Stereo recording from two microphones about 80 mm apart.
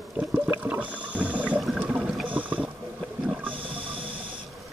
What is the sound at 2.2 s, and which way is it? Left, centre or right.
Boat, right.